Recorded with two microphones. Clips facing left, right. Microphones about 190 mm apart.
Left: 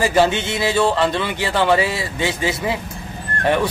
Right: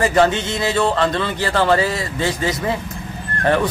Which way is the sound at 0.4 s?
25° left (ahead or behind).